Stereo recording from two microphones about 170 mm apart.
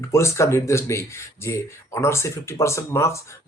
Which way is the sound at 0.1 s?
15° left (ahead or behind).